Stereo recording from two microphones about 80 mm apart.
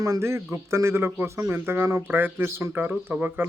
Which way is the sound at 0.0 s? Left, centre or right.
Right.